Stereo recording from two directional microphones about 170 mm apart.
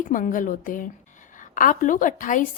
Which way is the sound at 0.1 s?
50° left (ahead or behind).